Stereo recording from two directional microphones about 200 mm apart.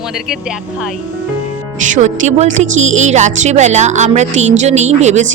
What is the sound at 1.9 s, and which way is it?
A woman's voice, 35° right (ahead or behind).